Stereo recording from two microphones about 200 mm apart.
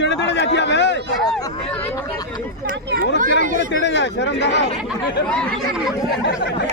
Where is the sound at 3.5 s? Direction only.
60° left (ahead or behind).